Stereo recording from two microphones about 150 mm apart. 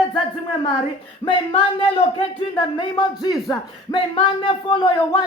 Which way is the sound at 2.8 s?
35° left (ahead or behind).